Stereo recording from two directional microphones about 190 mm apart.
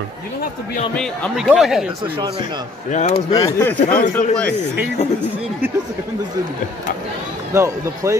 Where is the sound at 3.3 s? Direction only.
20° left (ahead or behind).